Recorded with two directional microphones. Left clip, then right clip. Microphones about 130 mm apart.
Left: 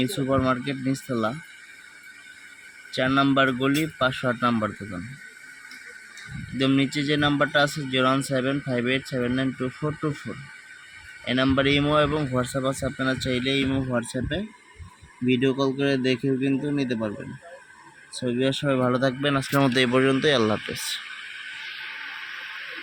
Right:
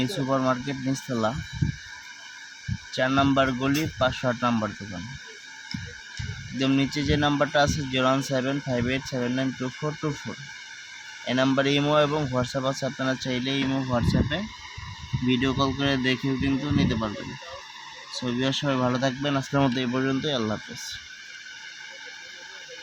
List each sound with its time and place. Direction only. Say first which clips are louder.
0.0 s speech: left 1 dB; 5° left (ahead or behind)
2.9 s speech: left 1 dB; centre (ahead or behind)
6.6 s speech: left 2 dB; centre (ahead or behind)
11.3 s speech: left 1 dB; centre (ahead or behind)
18.2 s speech: left 2 dB; 10° left (ahead or behind)
19.7 s speech: left 6 dB; 20° left (ahead or behind)